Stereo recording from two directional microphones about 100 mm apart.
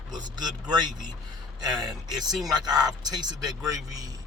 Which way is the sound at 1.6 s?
40° right (ahead or behind).